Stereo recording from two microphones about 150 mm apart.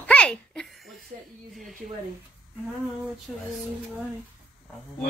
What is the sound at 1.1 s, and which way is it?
Speech, 50° right (ahead or behind).